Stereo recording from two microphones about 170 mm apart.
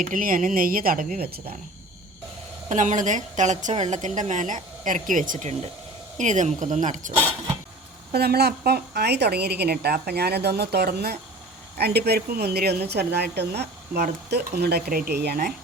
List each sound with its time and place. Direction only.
0.0 s speech: 55° right (ahead or behind)
2.6 s a woman's voice: 45° right (ahead or behind)
8.1 s a woman's voice: 70° right (ahead or behind)